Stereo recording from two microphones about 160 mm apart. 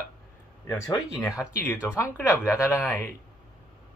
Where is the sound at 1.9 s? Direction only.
15° left (ahead or behind).